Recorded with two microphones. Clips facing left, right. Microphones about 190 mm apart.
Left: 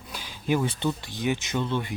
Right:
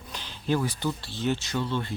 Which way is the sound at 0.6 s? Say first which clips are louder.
Left 2 dB; 20° left (ahead or behind).